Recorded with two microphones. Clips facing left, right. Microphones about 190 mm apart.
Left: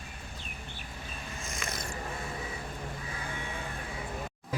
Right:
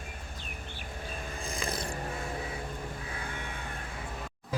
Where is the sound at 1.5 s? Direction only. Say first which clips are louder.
Right 5 dB; 30° right (ahead or behind).